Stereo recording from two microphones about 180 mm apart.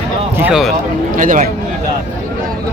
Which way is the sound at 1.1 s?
45° right (ahead or behind).